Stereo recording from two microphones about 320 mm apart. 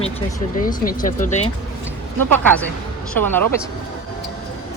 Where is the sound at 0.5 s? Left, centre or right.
Left.